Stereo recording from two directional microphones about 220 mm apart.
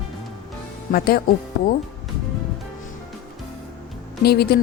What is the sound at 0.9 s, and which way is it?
Speech, 45° left (ahead or behind).